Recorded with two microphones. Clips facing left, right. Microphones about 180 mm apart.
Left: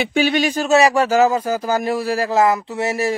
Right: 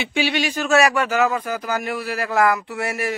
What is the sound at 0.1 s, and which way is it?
Speech, 40° left (ahead or behind).